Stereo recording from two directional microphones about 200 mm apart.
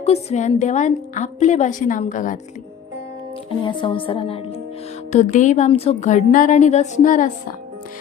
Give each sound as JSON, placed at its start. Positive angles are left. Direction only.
{"t": 0.0, "sound": "a woman's voice", "side_deg": 30}
{"t": 3.6, "sound": "a woman's voice", "side_deg": 25}